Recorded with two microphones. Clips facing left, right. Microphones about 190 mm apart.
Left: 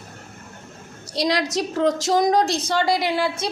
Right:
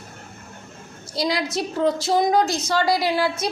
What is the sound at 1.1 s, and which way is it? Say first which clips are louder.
Speech: left 2 dB; 80° left.